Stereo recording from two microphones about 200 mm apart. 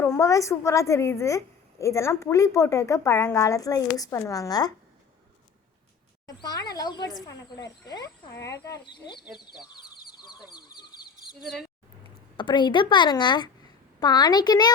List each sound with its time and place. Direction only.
0.0 s a woman's voice: 15° left (ahead or behind)
6.2 s a woman's voice: 20° left (ahead or behind)
10.1 s a sound: 20° left (ahead or behind)
12.4 s a woman's voice: 25° left (ahead or behind)